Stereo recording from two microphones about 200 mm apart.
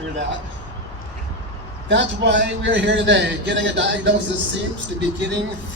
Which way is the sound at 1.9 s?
60° right (ahead or behind).